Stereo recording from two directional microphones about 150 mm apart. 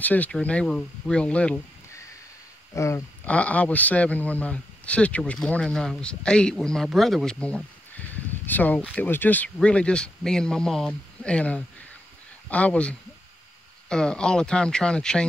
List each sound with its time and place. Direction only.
0.0 s speech: 10° left (ahead or behind)
2.7 s speech: 20° left (ahead or behind)
3.3 s speech: 10° left (ahead or behind)